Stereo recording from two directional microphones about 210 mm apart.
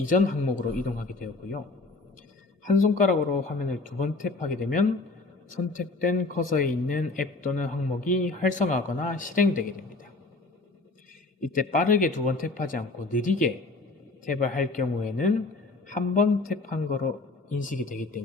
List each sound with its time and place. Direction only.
0.0 s speech: 40° left (ahead or behind)
2.6 s speech: 40° left (ahead or behind)
11.4 s speech: 40° left (ahead or behind)